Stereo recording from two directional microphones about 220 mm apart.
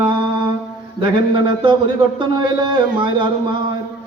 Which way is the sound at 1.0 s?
20° right (ahead or behind).